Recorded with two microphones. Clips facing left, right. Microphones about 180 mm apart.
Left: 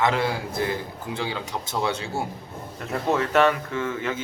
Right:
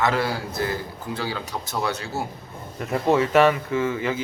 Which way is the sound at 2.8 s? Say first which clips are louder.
Right 4 dB; centre (ahead or behind).